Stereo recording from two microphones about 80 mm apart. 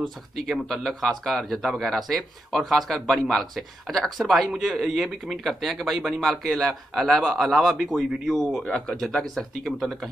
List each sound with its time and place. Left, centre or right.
0.0 s speech: centre